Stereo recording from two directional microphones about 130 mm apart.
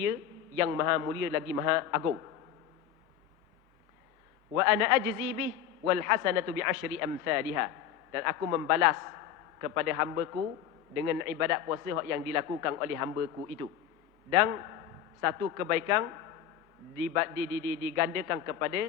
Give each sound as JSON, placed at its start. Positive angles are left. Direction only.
{"t": 0.6, "sound": "a man's voice", "side_deg": -20}
{"t": 4.5, "sound": "a man's voice", "side_deg": -20}
{"t": 17.9, "sound": "a man's voice", "side_deg": -20}